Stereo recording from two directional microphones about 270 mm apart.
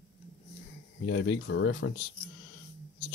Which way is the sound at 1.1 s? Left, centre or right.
Left.